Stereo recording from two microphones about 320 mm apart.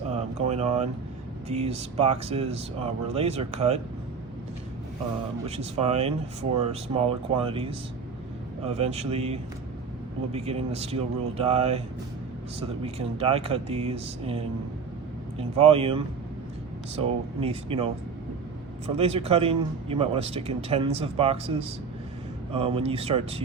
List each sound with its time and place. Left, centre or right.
0.1 s a sound: centre
1.5 s speech: centre
5.5 s speech: centre
18.9 s speech: centre